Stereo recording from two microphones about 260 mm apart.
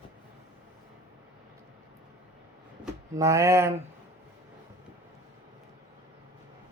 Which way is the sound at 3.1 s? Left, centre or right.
Centre.